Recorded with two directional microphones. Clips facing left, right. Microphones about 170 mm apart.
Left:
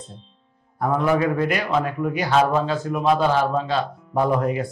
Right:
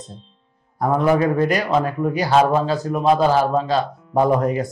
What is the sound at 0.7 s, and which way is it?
Speech, 40° right (ahead or behind).